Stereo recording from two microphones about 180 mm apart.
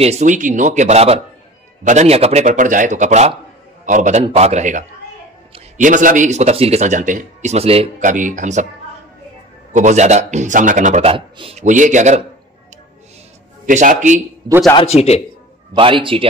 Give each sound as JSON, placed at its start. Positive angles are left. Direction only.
{"t": 0.0, "sound": "speech", "side_deg": -40}
{"t": 8.0, "sound": "speech", "side_deg": -45}
{"t": 9.7, "sound": "speech", "side_deg": -40}
{"t": 11.6, "sound": "speech", "side_deg": -45}
{"t": 13.7, "sound": "speech", "side_deg": -45}
{"t": 15.0, "sound": "a man's voice", "side_deg": 35}
{"t": 15.7, "sound": "a man's voice", "side_deg": -30}